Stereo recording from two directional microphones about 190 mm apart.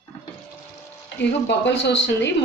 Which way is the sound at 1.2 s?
65° left (ahead or behind).